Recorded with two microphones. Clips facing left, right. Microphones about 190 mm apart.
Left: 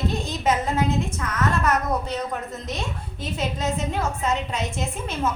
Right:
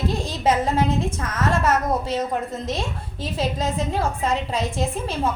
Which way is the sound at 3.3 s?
30° right (ahead or behind).